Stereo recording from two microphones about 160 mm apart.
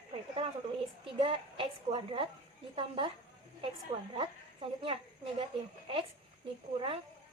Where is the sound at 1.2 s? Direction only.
30° right (ahead or behind).